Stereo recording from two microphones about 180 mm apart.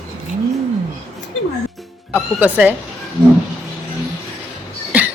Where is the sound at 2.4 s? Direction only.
10° right (ahead or behind).